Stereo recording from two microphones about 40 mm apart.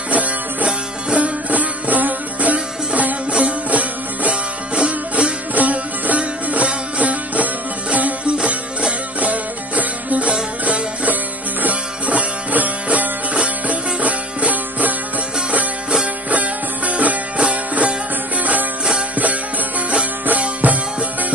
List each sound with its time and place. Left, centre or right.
0.1 s music: right
9.2 s music: right
16.3 s music: right
19.1 s music: right
20.6 s music: right